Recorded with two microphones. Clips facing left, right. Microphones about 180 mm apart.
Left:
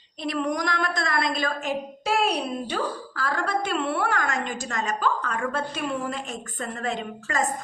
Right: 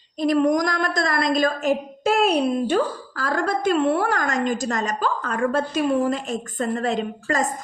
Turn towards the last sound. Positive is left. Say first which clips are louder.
# right 5 dB
turn(degrees=-40)  # may be behind; listen again after turning